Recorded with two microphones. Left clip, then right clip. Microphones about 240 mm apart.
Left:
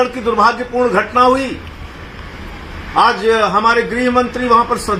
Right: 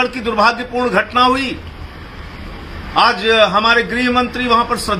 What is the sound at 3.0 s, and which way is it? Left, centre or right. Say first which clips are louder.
A man's voice: even; right.